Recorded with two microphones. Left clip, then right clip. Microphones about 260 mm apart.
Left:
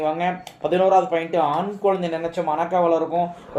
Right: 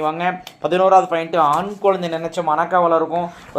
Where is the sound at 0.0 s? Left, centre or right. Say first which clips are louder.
Right 2 dB; right.